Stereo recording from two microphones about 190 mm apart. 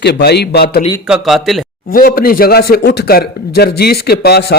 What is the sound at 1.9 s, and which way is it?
Speech, 50° left (ahead or behind).